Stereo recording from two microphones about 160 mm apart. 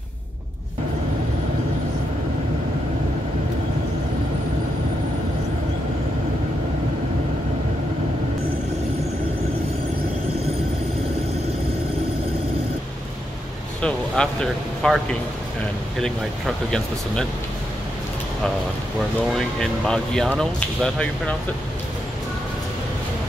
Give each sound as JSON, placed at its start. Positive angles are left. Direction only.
{"t": 13.7, "sound": "speech", "side_deg": 5}
{"t": 16.0, "sound": "speech", "side_deg": 5}
{"t": 19.3, "sound": "speech", "side_deg": 5}